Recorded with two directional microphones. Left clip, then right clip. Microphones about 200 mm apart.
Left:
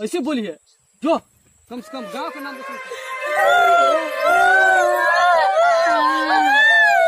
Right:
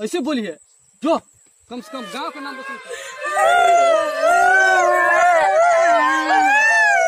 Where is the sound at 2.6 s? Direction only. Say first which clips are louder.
Left 1 dB; 45° left (ahead or behind).